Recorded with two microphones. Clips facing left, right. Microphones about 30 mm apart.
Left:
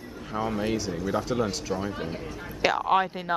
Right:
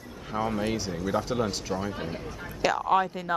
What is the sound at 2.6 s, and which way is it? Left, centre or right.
Speech, left.